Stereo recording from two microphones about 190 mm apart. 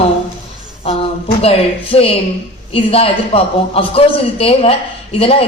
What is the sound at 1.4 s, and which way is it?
A man's voice, 30° left (ahead or behind).